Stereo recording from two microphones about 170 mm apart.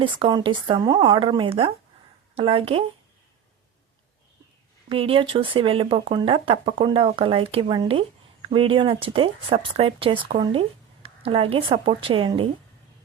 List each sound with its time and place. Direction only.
0.0 s speech: 30° right (ahead or behind)
4.9 s speech: 30° right (ahead or behind)